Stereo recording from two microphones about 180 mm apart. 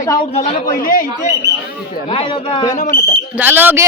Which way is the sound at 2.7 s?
45° left (ahead or behind).